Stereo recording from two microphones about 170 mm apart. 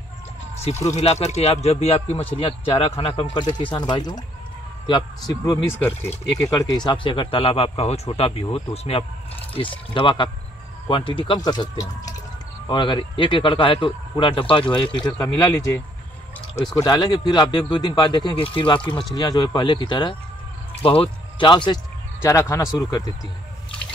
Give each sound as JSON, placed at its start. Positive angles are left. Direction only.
{"t": 0.8, "sound": "a man's voice", "side_deg": 40}
{"t": 5.4, "sound": "a man's voice", "side_deg": 15}
{"t": 16.5, "sound": "a man's voice", "side_deg": 20}
{"t": 22.2, "sound": "a man's voice", "side_deg": 15}